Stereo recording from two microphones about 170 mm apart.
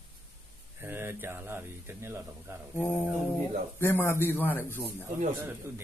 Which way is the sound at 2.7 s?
15° left (ahead or behind).